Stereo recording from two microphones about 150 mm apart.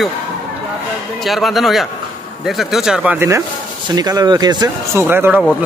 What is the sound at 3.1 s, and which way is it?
A man's voice, 20° right (ahead or behind).